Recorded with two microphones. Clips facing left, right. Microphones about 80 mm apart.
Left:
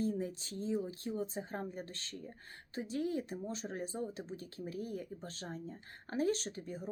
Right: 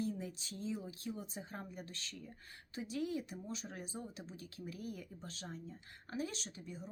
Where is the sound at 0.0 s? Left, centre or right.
Left.